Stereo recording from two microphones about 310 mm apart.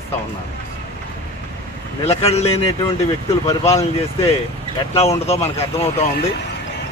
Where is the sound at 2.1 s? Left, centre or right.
Centre.